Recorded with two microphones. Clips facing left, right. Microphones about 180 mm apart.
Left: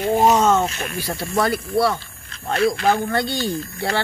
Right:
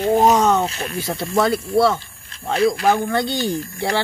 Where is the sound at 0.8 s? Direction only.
20° right (ahead or behind).